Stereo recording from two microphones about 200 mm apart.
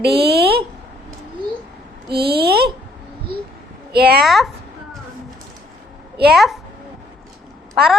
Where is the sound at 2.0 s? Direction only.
50° right (ahead or behind).